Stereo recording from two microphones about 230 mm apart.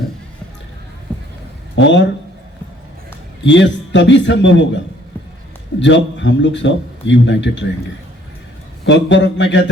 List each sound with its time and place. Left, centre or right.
1.7 s speech: left
3.4 s a man's voice: left
5.8 s a man's voice: left
8.8 s a man's voice: left